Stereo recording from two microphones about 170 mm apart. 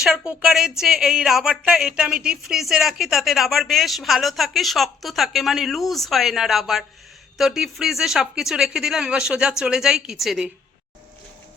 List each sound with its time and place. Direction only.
0.0 s a woman's voice: 5° right (ahead or behind)